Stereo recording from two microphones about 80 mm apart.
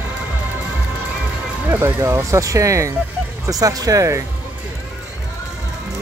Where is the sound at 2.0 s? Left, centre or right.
Right.